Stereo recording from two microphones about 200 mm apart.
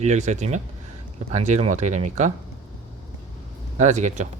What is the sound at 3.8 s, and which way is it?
Speech, 35° right (ahead or behind).